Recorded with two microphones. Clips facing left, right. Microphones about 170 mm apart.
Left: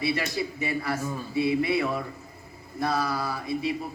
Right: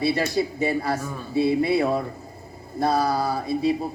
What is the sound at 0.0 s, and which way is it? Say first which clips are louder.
Speech: right 5 dB; 35° right (ahead or behind).